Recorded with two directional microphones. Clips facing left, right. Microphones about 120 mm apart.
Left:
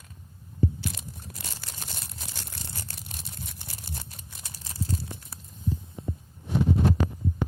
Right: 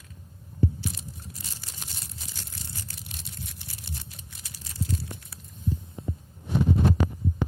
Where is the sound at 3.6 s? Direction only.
45° left (ahead or behind).